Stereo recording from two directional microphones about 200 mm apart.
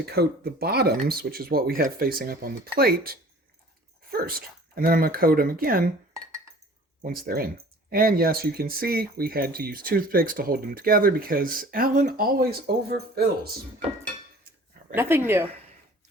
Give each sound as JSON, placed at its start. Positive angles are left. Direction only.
{"t": 0.0, "sound": "speech", "side_deg": -50}
{"t": 7.0, "sound": "speech", "side_deg": -50}
{"t": 14.9, "sound": "speech", "side_deg": -10}